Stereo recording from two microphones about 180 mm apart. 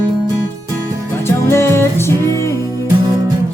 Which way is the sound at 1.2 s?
15° left (ahead or behind).